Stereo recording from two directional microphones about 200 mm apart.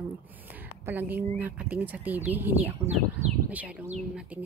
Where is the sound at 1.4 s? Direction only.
10° right (ahead or behind).